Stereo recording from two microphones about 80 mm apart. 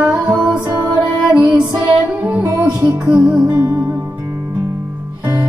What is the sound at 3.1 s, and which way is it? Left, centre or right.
Music, centre.